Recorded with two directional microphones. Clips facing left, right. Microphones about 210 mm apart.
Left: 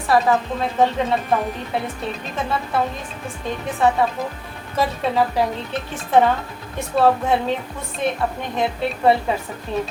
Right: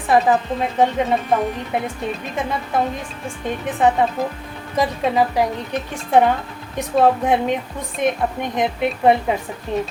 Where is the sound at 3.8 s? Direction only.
20° right (ahead or behind).